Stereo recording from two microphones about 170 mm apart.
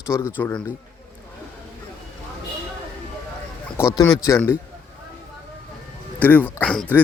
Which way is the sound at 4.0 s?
20° left (ahead or behind).